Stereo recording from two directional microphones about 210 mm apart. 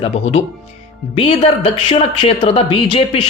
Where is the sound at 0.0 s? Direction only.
30° left (ahead or behind).